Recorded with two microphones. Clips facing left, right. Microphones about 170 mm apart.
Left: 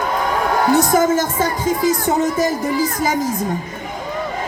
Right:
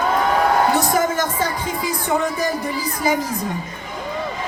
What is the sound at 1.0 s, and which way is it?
Speech, 45° left (ahead or behind).